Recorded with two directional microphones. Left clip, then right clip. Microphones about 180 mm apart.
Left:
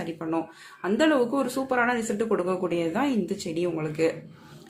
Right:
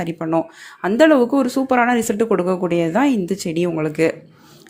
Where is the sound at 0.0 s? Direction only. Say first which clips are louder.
Right 9 dB; 35° right (ahead or behind).